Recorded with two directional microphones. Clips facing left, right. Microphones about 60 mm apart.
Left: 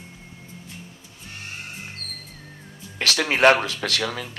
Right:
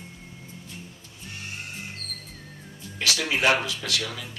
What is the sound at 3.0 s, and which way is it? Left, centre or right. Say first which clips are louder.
Speech: left 6 dB; left.